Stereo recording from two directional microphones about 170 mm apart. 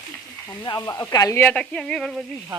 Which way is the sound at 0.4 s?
25° left (ahead or behind).